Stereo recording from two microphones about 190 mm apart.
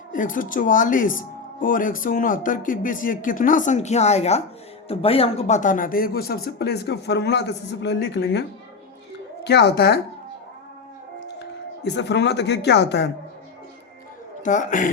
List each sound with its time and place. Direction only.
0.1 s speech: 45° left (ahead or behind)
11.3 s speech: 60° left (ahead or behind)
14.4 s a woman's voice: 40° left (ahead or behind)